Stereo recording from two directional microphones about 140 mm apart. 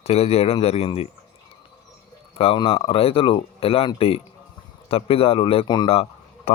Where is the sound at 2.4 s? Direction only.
40° left (ahead or behind).